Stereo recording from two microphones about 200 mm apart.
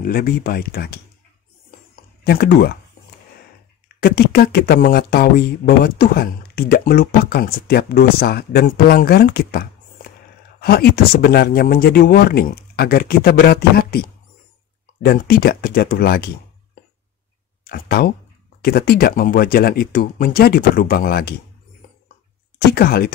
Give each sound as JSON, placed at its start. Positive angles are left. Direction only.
{"t": 0.0, "sound": "speech", "side_deg": 45}
{"t": 2.2, "sound": "speech", "side_deg": 55}
{"t": 4.0, "sound": "speech", "side_deg": 50}
{"t": 17.6, "sound": "speech", "side_deg": 50}
{"t": 22.7, "sound": "speech", "side_deg": 50}